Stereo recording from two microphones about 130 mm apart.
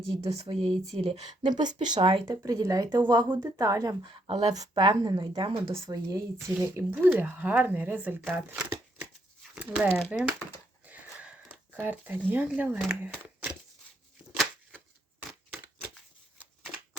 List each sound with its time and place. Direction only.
0.2 s speech: 50° right (ahead or behind)
1.4 s speech: 35° right (ahead or behind)
2.3 s speech: 30° right (ahead or behind)
4.0 s speech: 40° right (ahead or behind)
5.7 s speech: 25° right (ahead or behind)
10.8 s sniff: 10° right (ahead or behind)
12.3 s speech: 10° right (ahead or behind)
15.5 s shuffling cards: 10° right (ahead or behind)